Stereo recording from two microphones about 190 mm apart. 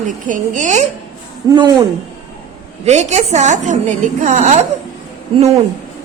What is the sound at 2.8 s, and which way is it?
A woman's voice, 35° right (ahead or behind).